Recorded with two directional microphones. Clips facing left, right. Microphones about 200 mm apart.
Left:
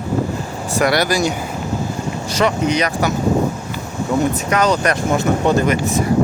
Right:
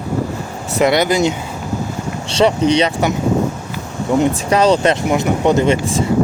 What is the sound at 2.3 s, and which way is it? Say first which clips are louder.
Speech: right 4 dB; 30° right (ahead or behind).